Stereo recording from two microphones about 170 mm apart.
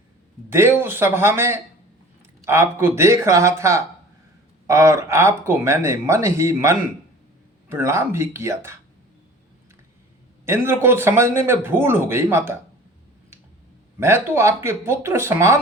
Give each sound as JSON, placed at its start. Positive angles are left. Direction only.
{"t": 0.5, "sound": "speech", "side_deg": -15}
{"t": 10.4, "sound": "speech", "side_deg": -15}
{"t": 14.0, "sound": "speech", "side_deg": -15}